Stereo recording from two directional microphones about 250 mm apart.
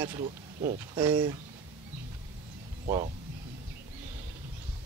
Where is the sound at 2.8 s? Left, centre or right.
Right.